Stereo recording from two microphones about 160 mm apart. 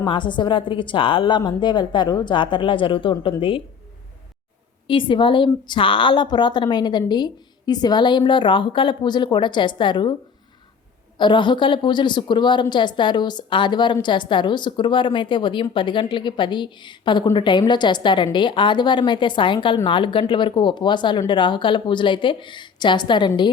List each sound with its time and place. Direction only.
0.0 s a woman's voice: 30° left (ahead or behind)
4.9 s a woman's voice: 30° left (ahead or behind)
11.2 s a woman's voice: 30° left (ahead or behind)